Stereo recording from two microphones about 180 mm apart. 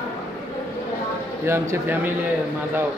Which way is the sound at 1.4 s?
15° right (ahead or behind).